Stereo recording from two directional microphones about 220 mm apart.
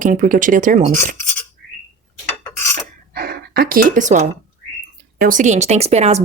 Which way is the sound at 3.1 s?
45° right (ahead or behind).